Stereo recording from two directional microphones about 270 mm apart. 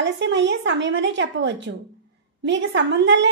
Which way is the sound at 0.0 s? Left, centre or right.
Right.